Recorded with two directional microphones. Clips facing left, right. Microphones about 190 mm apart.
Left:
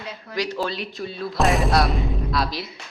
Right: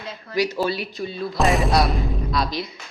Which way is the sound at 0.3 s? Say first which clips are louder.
Right 4 dB; 5° right (ahead or behind).